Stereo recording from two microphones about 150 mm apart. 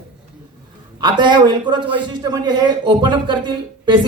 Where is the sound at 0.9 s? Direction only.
30° right (ahead or behind).